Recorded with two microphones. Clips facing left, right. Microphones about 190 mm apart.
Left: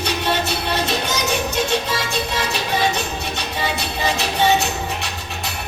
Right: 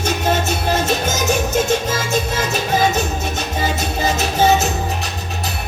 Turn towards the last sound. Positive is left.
turn(degrees=-45)  # may be behind; listen again after turning